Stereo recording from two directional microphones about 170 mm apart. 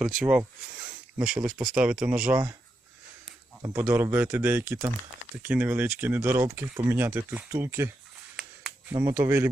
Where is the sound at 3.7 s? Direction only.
10° right (ahead or behind).